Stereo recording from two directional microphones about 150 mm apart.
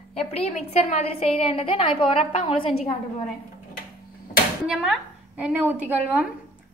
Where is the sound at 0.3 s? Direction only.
40° left (ahead or behind).